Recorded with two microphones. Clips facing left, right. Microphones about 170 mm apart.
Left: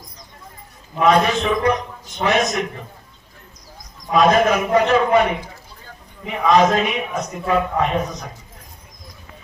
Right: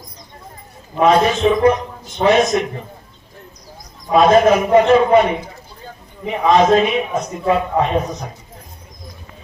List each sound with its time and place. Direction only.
0.9 s a man's voice: 25° right (ahead or behind)
4.1 s a man's voice: 30° right (ahead or behind)
6.2 s a man's voice: 30° right (ahead or behind)